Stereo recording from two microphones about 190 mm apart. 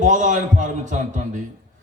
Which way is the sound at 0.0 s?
40° right (ahead or behind).